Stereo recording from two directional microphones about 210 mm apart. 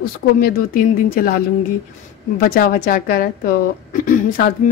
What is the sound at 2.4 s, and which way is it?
A woman's voice, 45° left (ahead or behind).